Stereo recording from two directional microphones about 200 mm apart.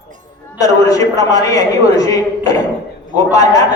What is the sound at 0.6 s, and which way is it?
A man's voice, 15° left (ahead or behind).